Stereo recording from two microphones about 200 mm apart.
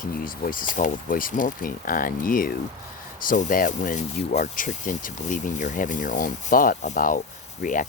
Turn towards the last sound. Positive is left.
turn(degrees=40)  # may be behind; listen again after turning